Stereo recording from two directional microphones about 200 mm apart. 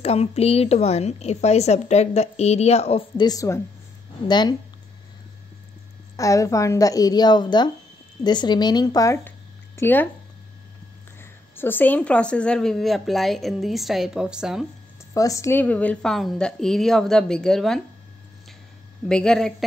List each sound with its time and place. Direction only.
0.0 s a woman's voice: 30° left (ahead or behind)
3.3 s a woman's voice: 15° left (ahead or behind)
6.1 s a woman's voice: 15° left (ahead or behind)
11.1 s a woman's voice: 10° left (ahead or behind)
15.1 s a woman's voice: 15° left (ahead or behind)
19.0 s a woman's voice: 5° left (ahead or behind)